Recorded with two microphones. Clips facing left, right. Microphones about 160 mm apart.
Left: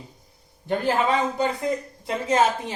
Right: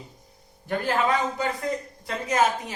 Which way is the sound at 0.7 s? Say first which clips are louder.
Left 2 dB; 20° left (ahead or behind).